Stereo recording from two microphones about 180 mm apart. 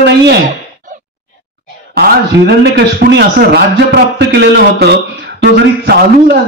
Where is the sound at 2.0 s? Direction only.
60° right (ahead or behind).